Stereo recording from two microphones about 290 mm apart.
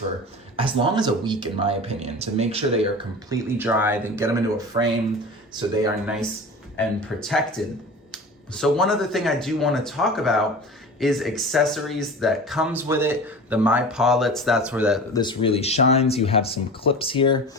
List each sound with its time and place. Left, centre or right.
0.5 s speech: centre
3.2 s speech: centre
6.7 s speech: centre
15.1 s speech: centre